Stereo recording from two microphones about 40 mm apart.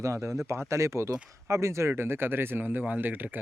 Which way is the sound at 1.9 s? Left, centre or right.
Right.